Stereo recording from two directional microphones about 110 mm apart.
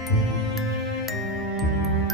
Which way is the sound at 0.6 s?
Centre (ahead or behind).